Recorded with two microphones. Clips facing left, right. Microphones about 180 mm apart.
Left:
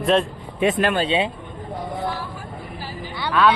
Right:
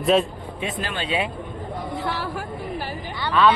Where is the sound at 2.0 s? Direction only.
75° right (ahead or behind).